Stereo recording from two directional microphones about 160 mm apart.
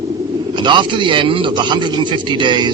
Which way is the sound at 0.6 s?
30° right (ahead or behind).